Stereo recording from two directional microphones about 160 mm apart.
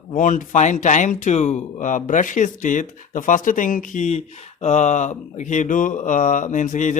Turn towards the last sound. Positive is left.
turn(degrees=50)  # may be behind; listen again after turning